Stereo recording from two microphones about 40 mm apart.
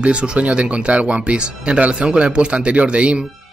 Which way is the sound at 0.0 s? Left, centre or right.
Right.